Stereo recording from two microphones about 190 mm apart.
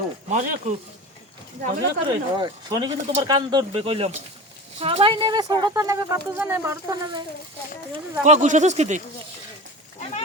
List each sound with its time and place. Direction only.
0.3 s speech: 40° right (ahead or behind)
2.3 s speech: 20° right (ahead or behind)
8.2 s speech: 40° right (ahead or behind)